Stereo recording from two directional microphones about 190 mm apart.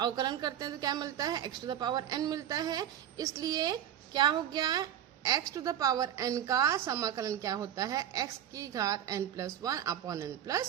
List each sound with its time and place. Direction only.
0.0 s a woman's voice: 20° right (ahead or behind)